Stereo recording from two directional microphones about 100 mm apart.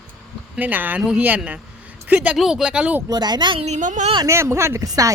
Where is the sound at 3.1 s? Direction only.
45° right (ahead or behind).